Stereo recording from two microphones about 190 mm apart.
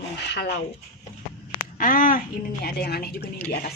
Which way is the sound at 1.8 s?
45° left (ahead or behind).